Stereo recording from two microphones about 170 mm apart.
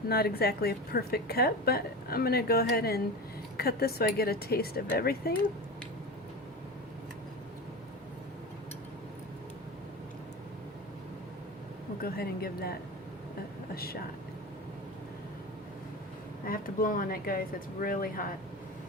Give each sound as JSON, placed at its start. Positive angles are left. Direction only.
{"t": 0.1, "sound": "a woman's voice", "side_deg": 65}
{"t": 12.0, "sound": "a woman's voice", "side_deg": 65}
{"t": 13.7, "sound": "a woman's voice", "side_deg": 65}
{"t": 16.5, "sound": "a woman's voice", "side_deg": 55}